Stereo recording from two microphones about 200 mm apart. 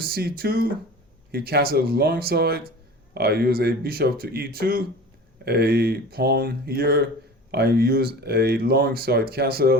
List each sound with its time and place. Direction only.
0.0 s speech: 50° right (ahead or behind)